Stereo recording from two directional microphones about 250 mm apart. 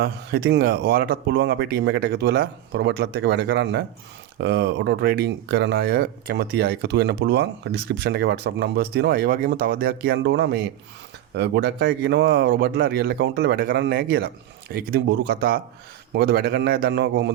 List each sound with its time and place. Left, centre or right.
0.0 s speech: right